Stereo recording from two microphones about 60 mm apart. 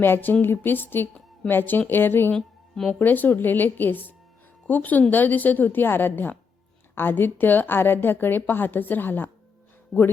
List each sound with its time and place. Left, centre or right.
0.0 s a woman's voice: left
2.3 s speech: centre
3.0 s a woman's voice: left
9.9 s speech: centre